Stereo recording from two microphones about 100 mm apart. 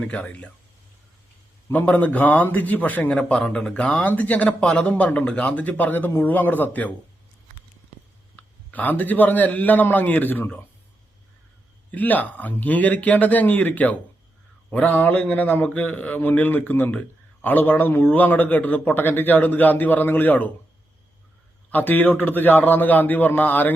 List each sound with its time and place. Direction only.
0.1 s a man's voice: 15° left (ahead or behind)
1.7 s a man's voice: 15° left (ahead or behind)
8.4 s a sound: 15° left (ahead or behind)
8.7 s a man's voice: 15° left (ahead or behind)
11.9 s a man's voice: 15° left (ahead or behind)
21.7 s a man's voice: 20° left (ahead or behind)